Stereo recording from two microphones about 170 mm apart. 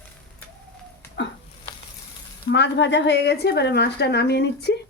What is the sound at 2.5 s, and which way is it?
A woman's voice, 90° left.